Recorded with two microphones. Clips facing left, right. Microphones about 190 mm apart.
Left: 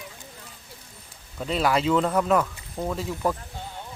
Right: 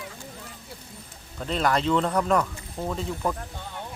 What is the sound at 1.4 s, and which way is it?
Speech, 5° left (ahead or behind).